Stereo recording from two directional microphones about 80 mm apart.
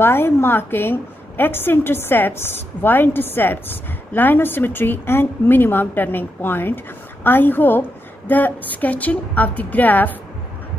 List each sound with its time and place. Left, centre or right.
0.0 s a woman's voice: left